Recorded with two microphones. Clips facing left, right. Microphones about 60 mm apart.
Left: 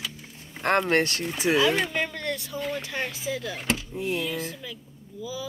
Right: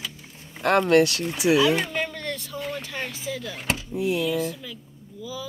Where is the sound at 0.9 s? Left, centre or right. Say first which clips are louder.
Right 5 dB; left.